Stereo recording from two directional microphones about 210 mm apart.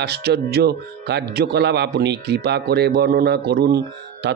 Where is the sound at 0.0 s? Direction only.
50° right (ahead or behind).